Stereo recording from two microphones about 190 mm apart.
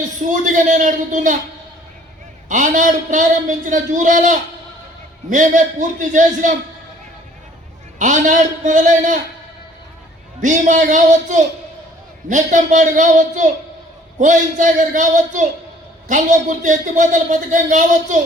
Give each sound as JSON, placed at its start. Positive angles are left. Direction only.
{"t": 0.3, "sound": "a man's voice", "side_deg": -40}
{"t": 2.5, "sound": "a man's voice", "side_deg": -40}
{"t": 7.9, "sound": "a man's voice", "side_deg": -40}
{"t": 10.4, "sound": "a man's voice", "side_deg": -40}